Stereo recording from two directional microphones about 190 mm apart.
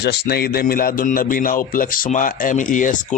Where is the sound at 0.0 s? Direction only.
60° left (ahead or behind).